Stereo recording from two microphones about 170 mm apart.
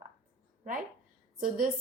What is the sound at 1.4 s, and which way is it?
Speech, 55° right (ahead or behind).